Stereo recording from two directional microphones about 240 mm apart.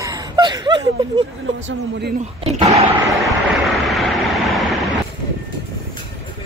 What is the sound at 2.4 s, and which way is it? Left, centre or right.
Speech, right.